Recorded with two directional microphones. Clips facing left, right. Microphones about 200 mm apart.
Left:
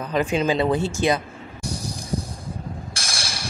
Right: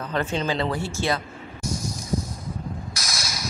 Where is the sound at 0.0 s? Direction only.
15° left (ahead or behind).